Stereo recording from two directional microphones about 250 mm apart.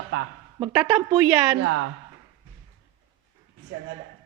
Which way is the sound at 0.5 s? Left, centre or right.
Centre.